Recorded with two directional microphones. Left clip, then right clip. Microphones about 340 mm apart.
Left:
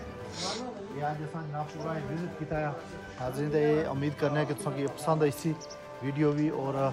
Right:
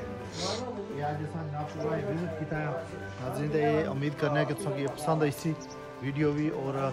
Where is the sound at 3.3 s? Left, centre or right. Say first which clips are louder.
Even; left.